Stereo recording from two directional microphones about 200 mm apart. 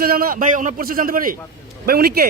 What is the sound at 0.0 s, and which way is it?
A man's voice, 50° right (ahead or behind).